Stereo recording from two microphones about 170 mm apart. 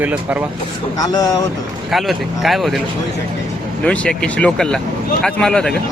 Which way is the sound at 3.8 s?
5° left (ahead or behind).